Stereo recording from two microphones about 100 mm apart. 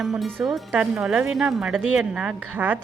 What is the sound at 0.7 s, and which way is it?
Speech, 10° right (ahead or behind).